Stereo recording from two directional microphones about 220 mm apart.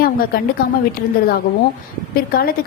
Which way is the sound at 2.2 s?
40° left (ahead or behind).